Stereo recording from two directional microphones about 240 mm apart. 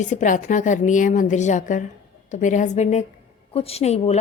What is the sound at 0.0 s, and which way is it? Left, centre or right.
A woman's voice, left.